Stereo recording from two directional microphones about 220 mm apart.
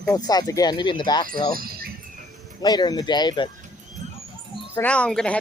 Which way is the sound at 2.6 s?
20° left (ahead or behind).